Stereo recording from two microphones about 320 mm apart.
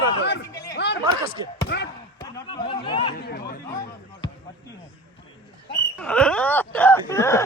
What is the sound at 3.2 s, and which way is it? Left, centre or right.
Chatter, left.